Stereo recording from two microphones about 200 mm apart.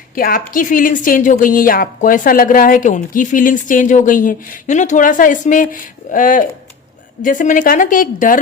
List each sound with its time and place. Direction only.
0.2 s a woman's voice: 45° left (ahead or behind)